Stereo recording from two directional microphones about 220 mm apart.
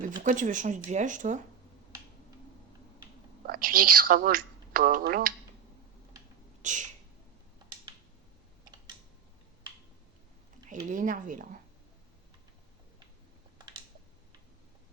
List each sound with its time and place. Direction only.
0.2 s speech: 35° right (ahead or behind)
3.4 s speech: 40° right (ahead or behind)
6.6 s a sound: 35° right (ahead or behind)
10.8 s speech: 35° right (ahead or behind)
13.6 s computer keyboard: 20° right (ahead or behind)